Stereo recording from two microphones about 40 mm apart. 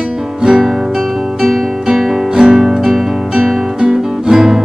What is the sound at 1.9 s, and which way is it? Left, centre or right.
Music, centre.